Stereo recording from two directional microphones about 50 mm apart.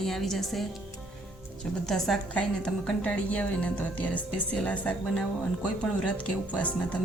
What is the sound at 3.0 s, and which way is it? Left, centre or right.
Speech, left.